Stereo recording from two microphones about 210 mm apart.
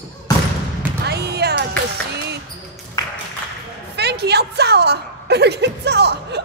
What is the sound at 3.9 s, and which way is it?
A woman's voice, 50° right (ahead or behind).